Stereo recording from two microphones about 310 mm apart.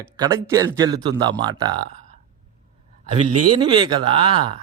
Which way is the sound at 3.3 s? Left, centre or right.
Right.